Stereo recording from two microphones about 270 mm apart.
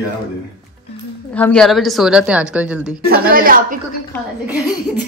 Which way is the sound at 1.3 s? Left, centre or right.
Centre.